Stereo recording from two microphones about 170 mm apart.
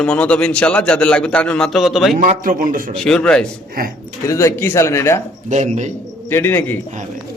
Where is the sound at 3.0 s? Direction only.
5° left (ahead or behind).